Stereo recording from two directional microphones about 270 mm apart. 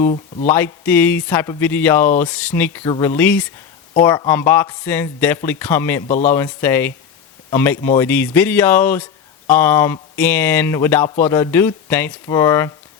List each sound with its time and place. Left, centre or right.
0.1 s speech: left
0.5 s speech: centre